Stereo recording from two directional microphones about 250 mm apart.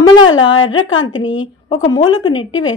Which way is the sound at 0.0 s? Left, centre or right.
Centre.